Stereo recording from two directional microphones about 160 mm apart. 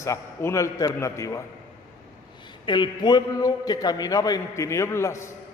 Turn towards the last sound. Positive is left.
turn(degrees=15)  # may be behind; listen again after turning